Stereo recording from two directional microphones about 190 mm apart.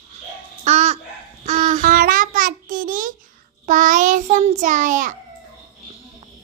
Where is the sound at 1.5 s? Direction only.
40° right (ahead or behind).